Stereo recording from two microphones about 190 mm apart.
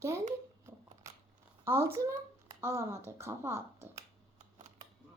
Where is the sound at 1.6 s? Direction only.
15° right (ahead or behind).